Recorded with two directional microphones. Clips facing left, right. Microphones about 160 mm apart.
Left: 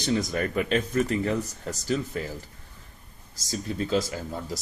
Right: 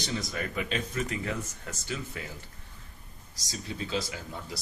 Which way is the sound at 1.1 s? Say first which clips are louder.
Left 8 dB; 35° left (ahead or behind).